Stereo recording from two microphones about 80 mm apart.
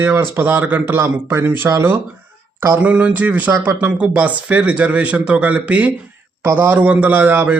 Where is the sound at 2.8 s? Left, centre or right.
Centre.